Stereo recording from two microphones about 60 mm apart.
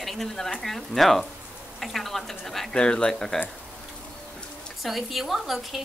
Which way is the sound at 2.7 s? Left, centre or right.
Centre.